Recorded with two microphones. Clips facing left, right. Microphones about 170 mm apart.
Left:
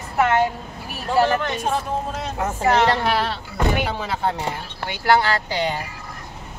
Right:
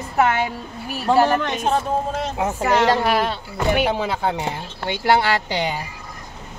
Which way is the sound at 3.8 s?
15° right (ahead or behind).